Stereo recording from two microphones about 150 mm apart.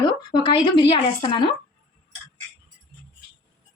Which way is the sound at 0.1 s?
30° left (ahead or behind).